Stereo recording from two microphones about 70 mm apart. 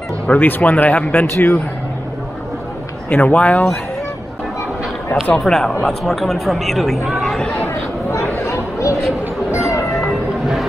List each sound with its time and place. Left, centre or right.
0.3 s speech: left
1.3 s speech: left
3.1 s speech: left
5.2 s speech: centre
7.7 s chatter: left
9.9 s music: centre